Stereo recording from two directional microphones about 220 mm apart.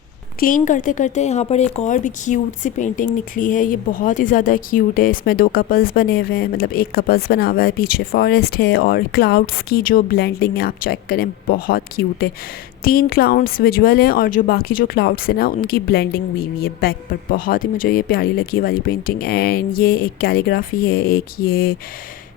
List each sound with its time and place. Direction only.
0.3 s speech: 40° left (ahead or behind)